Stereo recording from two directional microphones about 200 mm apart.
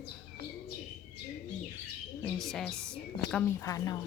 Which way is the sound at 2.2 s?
Centre (ahead or behind).